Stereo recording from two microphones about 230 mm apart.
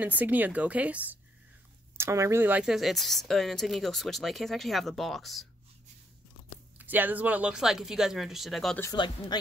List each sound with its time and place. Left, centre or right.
0.0 s speech: centre
6.8 s speech: centre
8.9 s speech: centre